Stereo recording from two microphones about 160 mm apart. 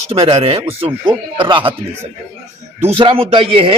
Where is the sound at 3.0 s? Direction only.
35° right (ahead or behind).